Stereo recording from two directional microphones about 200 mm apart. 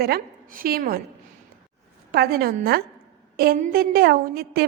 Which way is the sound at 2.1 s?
50° right (ahead or behind).